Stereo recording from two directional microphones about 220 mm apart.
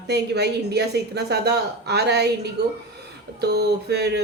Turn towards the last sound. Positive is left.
turn(degrees=-50)  # may be behind; listen again after turning